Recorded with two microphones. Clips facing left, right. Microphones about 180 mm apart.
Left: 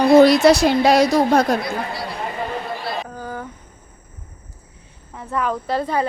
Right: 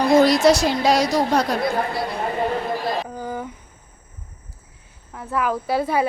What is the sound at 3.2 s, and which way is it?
Insect, 15° right (ahead or behind).